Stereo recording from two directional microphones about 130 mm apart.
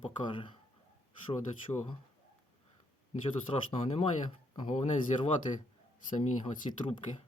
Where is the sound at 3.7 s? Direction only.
50° left (ahead or behind).